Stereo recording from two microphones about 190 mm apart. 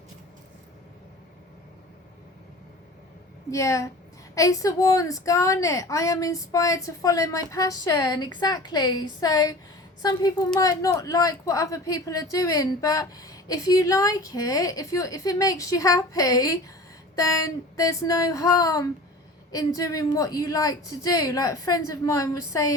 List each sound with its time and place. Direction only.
3.5 s a woman's voice: 15° left (ahead or behind)